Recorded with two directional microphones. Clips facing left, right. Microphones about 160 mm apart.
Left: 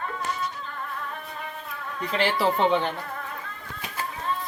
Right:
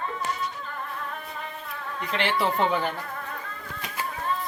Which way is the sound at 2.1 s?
35° left (ahead or behind).